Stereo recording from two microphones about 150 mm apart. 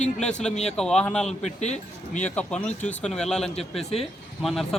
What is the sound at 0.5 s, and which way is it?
Speech, 45° left (ahead or behind).